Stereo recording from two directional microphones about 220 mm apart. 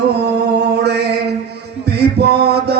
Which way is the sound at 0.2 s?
50° right (ahead or behind).